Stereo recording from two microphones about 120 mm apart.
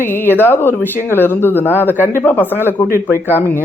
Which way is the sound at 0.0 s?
20° left (ahead or behind).